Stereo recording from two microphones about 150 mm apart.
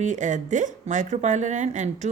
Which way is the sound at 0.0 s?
55° right (ahead or behind).